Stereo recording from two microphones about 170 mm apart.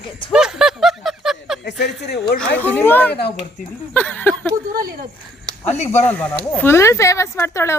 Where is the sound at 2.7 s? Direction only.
10° left (ahead or behind).